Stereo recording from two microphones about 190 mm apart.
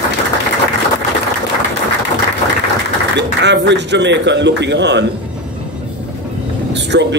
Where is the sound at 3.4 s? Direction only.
65° right (ahead or behind).